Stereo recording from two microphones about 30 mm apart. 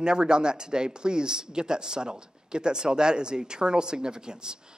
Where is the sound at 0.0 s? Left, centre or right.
Right.